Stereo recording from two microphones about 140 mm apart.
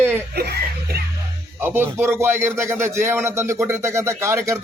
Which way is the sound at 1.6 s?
15° right (ahead or behind).